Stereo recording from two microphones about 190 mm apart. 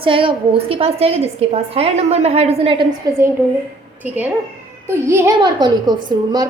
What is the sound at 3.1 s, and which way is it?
A child's voice, 20° right (ahead or behind).